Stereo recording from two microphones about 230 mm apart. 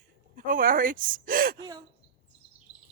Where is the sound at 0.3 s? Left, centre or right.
Right.